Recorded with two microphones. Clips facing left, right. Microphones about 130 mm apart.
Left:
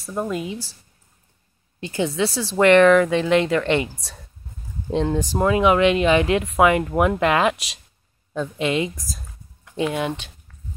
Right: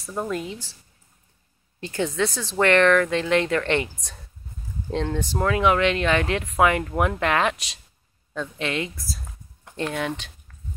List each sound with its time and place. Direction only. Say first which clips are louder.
0.0 s speech: left 2 dB; 5° left (ahead or behind)
1.8 s speech: left 2 dB; 5° left (ahead or behind)